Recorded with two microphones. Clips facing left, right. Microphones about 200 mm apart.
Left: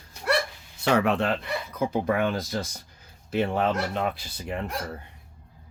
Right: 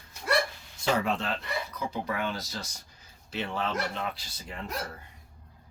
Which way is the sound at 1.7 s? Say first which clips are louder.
Left 11 dB; 50° left (ahead or behind).